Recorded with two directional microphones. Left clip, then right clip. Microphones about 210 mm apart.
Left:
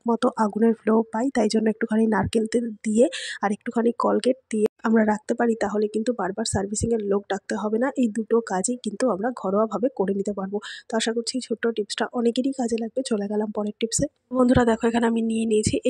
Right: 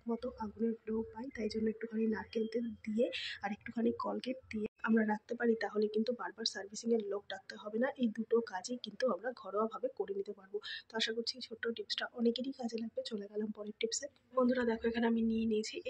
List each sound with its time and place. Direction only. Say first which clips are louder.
0.0 s speech: left 18 dB; 55° left (ahead or behind)